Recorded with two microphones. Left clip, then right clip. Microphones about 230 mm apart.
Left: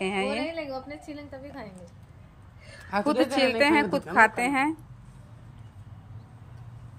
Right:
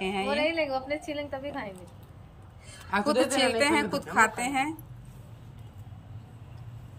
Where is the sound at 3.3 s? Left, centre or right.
Centre.